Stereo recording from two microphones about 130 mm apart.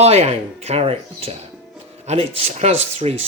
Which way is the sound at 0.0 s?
55° right (ahead or behind).